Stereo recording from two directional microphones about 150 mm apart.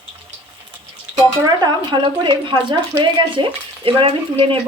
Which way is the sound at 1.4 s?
30° right (ahead or behind).